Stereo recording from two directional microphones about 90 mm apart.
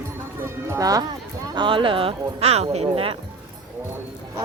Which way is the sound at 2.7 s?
85° right.